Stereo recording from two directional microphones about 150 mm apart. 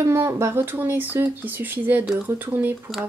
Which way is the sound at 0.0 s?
20° right (ahead or behind).